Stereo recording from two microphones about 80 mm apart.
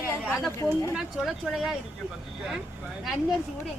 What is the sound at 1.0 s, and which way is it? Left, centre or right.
Speech, centre.